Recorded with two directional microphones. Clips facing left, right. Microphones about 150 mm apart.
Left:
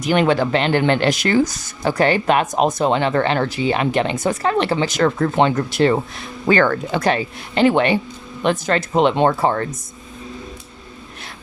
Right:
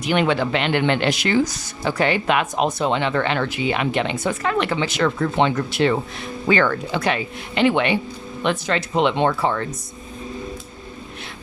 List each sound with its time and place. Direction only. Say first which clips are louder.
0.0 s speech: left 3 dB; 40° left (ahead or behind)